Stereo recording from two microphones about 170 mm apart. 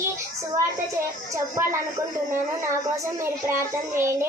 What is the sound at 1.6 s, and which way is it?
Speech, 15° right (ahead or behind).